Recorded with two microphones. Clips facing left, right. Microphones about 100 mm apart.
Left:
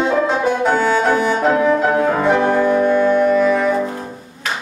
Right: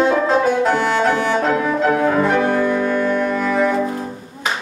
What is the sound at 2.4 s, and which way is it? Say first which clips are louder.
Music: left 2 dB; 25° left (ahead or behind).